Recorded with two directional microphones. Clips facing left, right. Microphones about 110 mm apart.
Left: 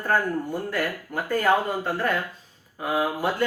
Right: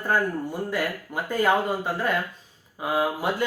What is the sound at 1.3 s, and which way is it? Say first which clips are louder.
Speech: even; 15° right (ahead or behind).